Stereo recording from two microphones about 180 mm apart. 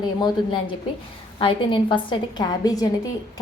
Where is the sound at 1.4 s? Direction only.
25° left (ahead or behind).